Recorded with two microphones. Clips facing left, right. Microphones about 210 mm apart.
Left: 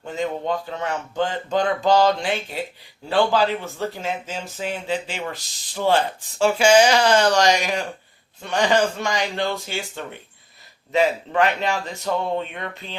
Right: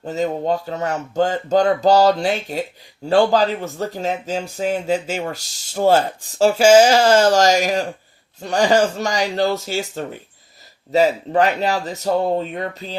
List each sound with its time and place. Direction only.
0.0 s speech: 40° right (ahead or behind)